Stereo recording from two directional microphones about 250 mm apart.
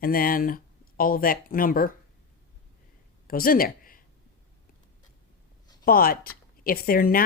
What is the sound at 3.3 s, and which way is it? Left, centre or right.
Speech, left.